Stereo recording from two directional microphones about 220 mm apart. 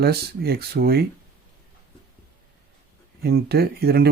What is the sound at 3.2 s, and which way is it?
Speech, 45° right (ahead or behind).